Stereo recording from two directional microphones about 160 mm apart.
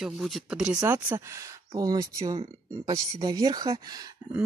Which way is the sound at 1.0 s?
15° right (ahead or behind).